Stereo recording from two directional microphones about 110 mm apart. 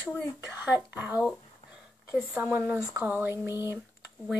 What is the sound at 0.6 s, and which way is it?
Speech, 15° right (ahead or behind).